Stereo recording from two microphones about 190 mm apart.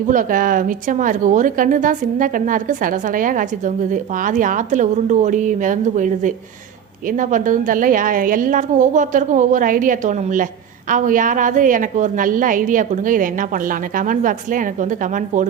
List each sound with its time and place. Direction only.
0.1 s a woman's voice: 45° right (ahead or behind)